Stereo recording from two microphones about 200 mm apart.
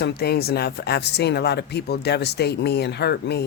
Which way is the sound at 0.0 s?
55° left (ahead or behind).